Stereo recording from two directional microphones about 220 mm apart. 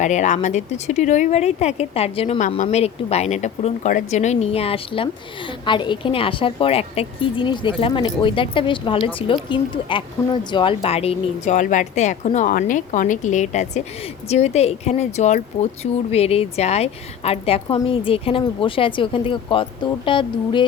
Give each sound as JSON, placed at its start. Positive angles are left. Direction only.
{"t": 0.0, "sound": "a woman's voice", "side_deg": 35}